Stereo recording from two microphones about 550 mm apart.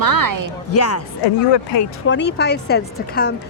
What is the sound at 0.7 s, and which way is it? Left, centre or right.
Speech, left.